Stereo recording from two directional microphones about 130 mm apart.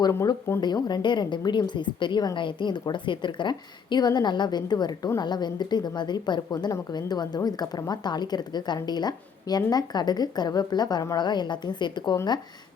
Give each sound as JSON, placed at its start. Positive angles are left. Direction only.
{"t": 0.0, "sound": "speech", "side_deg": 25}
{"t": 0.6, "sound": "a woman's voice", "side_deg": 35}